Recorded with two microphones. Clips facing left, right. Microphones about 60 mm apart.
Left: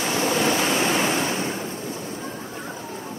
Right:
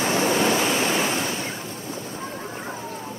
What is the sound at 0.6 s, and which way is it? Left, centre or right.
Waves, centre.